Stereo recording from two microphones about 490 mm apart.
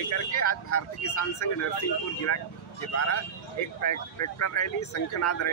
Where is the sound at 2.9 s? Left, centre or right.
Left.